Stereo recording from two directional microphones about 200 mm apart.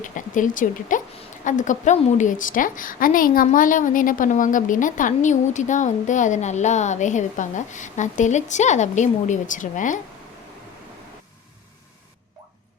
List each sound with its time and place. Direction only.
0.0 s a woman's voice: 40° left (ahead or behind)